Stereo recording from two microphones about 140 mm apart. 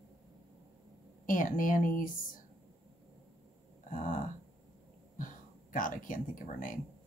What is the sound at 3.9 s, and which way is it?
Speech, 70° left (ahead or behind).